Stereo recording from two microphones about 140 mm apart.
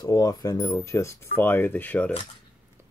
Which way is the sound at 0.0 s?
25° left (ahead or behind).